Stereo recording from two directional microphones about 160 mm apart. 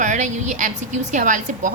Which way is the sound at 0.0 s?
50° right (ahead or behind).